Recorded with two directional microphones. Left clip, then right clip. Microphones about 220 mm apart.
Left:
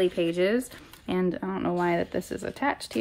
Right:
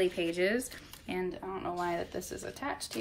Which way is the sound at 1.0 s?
20° left (ahead or behind).